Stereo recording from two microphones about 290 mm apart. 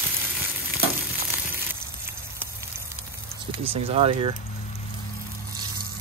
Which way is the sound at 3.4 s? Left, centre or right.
Centre.